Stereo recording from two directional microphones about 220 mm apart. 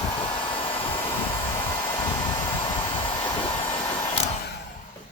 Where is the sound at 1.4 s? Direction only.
10° left (ahead or behind).